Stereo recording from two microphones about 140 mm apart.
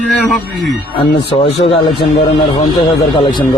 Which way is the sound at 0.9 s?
45° left (ahead or behind).